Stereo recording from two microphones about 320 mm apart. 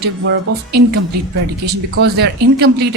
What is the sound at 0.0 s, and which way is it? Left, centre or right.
Speech, right.